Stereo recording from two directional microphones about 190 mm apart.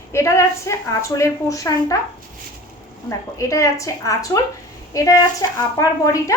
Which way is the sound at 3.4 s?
15° left (ahead or behind).